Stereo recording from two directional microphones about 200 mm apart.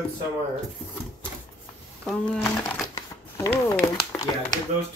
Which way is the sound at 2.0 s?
5° left (ahead or behind).